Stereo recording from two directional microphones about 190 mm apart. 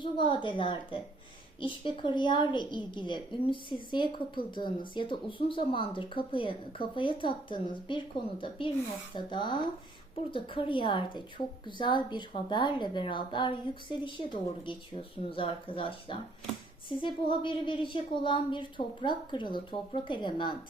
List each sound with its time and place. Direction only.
0.0 s a woman's voice: 25° left (ahead or behind)